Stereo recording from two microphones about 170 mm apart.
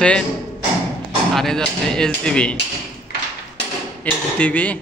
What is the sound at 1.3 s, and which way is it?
Speech, centre (ahead or behind).